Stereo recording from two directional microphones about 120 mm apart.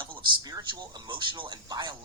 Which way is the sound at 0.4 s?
35° right (ahead or behind).